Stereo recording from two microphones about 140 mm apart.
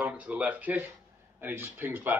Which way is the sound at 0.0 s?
10° right (ahead or behind).